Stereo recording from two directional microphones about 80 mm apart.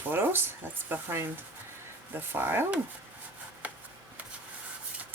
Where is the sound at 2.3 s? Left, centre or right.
Right.